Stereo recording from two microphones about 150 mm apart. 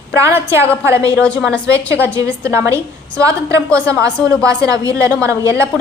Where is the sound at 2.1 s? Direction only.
20° right (ahead or behind).